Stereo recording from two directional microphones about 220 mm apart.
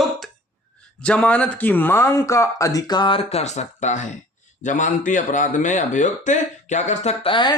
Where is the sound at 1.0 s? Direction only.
5° left (ahead or behind).